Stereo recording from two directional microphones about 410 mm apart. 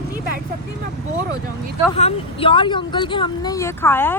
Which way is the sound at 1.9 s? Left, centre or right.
Centre.